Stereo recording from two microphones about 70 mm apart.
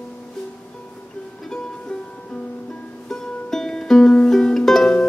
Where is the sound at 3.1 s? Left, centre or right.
Centre.